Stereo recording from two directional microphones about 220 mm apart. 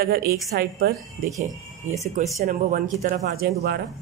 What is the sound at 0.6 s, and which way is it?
Speech, 45° right (ahead or behind).